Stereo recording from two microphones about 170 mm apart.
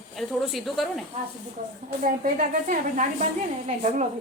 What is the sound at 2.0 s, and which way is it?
A woman's voice, 50° right (ahead or behind).